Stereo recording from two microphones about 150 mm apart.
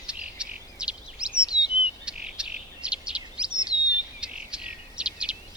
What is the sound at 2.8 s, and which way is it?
Bird vocalization, 5° right (ahead or behind).